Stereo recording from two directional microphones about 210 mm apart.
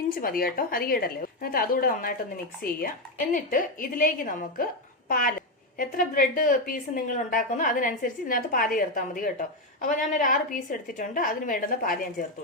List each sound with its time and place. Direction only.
0.1 s a woman's voice: 45° left (ahead or behind)
3.3 s a woman's voice: 40° left (ahead or behind)